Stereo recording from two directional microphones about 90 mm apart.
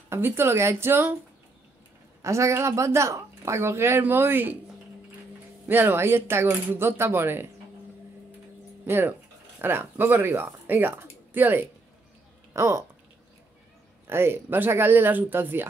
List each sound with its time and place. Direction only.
0.1 s speech: 30° right (ahead or behind)
2.2 s speech: 35° right (ahead or behind)
5.7 s speech: 25° right (ahead or behind)
8.8 s speech: 25° right (ahead or behind)
14.0 s speech: 25° right (ahead or behind)